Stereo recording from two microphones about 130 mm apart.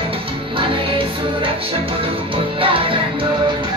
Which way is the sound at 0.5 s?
40° right (ahead or behind).